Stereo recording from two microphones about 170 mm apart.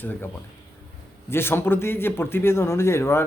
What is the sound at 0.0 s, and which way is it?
Speech, 10° left (ahead or behind).